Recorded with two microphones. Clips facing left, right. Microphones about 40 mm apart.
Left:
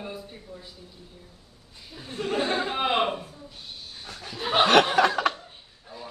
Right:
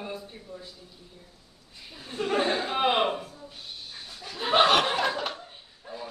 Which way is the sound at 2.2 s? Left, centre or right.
Centre.